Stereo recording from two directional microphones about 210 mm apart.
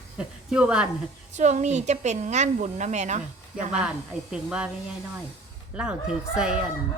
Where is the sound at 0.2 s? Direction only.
5° right (ahead or behind).